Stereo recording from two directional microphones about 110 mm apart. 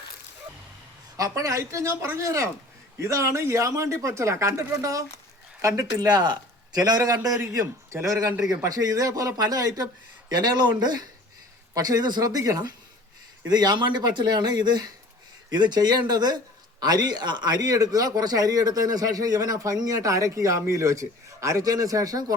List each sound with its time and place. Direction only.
1.1 s speech: 30° right (ahead or behind)